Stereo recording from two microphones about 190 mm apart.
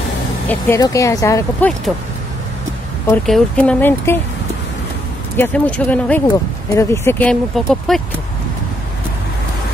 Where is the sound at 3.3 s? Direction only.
5° left (ahead or behind).